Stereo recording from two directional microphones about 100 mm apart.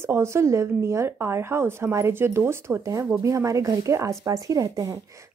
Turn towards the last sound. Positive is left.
turn(degrees=-35)  # may be behind; listen again after turning